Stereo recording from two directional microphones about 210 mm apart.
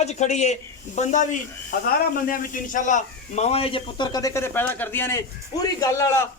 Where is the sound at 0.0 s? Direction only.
35° left (ahead or behind).